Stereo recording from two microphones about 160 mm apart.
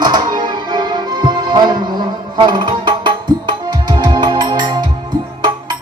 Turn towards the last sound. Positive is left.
turn(degrees=-30)  # may be behind; listen again after turning